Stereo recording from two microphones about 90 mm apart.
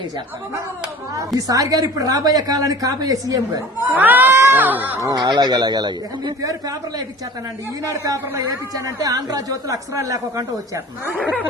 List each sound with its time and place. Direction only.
1.5 s a woman's voice: 40° right (ahead or behind)
3.8 s speech: 20° right (ahead or behind)
4.9 s a man's voice: 40° right (ahead or behind)
5.2 s a woman's voice: 55° right (ahead or behind); by 10.4 s 35° right (ahead or behind)